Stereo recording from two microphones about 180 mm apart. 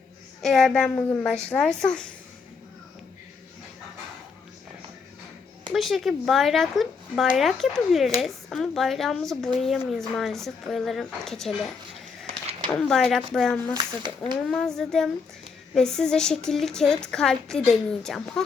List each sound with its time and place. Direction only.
0.4 s a woman's voice: centre (ahead or behind)
5.7 s a woman's voice: centre (ahead or behind)
12.2 s a sound: 35° right (ahead or behind)
12.7 s a woman's voice: centre (ahead or behind)